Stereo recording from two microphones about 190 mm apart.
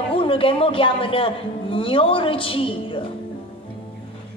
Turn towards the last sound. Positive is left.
turn(degrees=30)  # may be behind; listen again after turning